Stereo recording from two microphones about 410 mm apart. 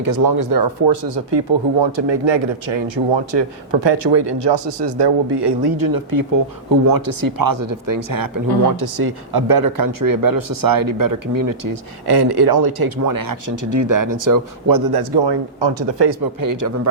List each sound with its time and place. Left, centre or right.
0.0 s speech: right